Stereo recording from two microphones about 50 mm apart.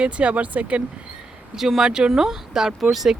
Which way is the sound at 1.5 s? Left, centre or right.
Centre.